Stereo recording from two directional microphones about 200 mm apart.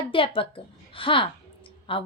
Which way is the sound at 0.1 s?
25° left (ahead or behind).